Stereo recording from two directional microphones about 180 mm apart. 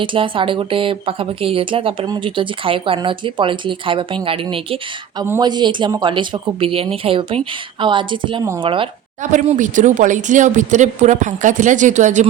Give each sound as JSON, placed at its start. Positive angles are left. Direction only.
{"t": 0.0, "sound": "speech", "side_deg": -30}
{"t": 5.2, "sound": "a woman's voice", "side_deg": -15}
{"t": 5.5, "sound": "speech", "side_deg": -25}
{"t": 9.3, "sound": "speech", "side_deg": -45}